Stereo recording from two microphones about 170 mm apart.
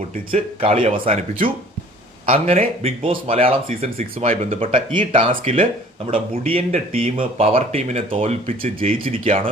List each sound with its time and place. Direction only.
0.3 s speech: 35° right (ahead or behind)